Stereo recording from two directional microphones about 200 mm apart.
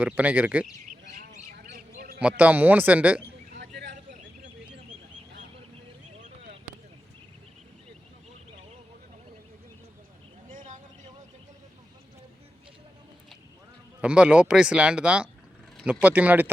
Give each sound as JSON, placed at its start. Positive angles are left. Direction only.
{"t": 0.0, "sound": "speech", "side_deg": -10}
{"t": 0.9, "sound": "bird", "side_deg": -45}
{"t": 1.7, "sound": "a sound", "side_deg": -45}
{"t": 2.4, "sound": "speech", "side_deg": -10}
{"t": 3.5, "sound": "a sound", "side_deg": -55}
{"t": 14.0, "sound": "speech", "side_deg": -5}